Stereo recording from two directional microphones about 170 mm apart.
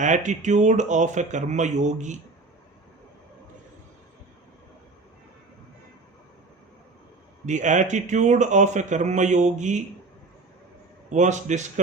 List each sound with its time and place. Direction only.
0.0 s speech: 45° right (ahead or behind)
7.4 s speech: 45° right (ahead or behind)
11.1 s speech: 45° right (ahead or behind)